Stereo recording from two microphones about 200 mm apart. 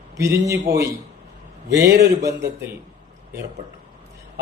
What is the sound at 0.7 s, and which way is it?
Speech, 15° right (ahead or behind).